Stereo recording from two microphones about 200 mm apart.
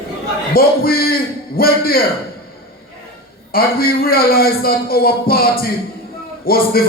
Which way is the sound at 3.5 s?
50° left (ahead or behind).